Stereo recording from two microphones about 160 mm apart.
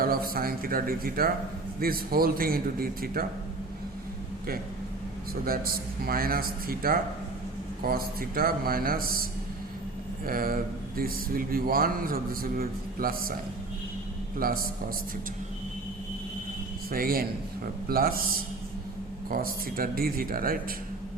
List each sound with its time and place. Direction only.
0.0 s a man's voice: 65° right (ahead or behind)
5.3 s a man's voice: 65° right (ahead or behind)
10.2 s speech: 65° right (ahead or behind)
14.3 s speech: 65° right (ahead or behind)
16.9 s a man's voice: 65° right (ahead or behind)
19.3 s speech: 65° right (ahead or behind)